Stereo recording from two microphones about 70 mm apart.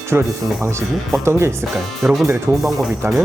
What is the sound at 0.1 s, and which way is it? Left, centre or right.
Speech, right.